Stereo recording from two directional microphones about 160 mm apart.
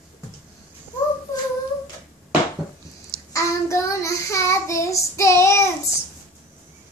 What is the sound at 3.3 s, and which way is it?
Child singing, 20° left (ahead or behind).